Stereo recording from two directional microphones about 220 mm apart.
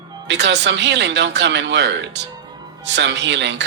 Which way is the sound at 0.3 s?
50° right (ahead or behind).